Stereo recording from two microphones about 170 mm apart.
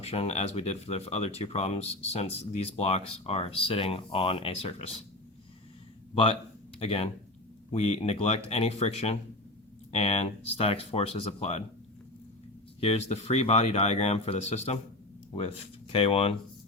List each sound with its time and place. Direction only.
0.0 s speech: 35° left (ahead or behind)
6.7 s speech: 35° left (ahead or behind)
12.8 s speech: 40° left (ahead or behind)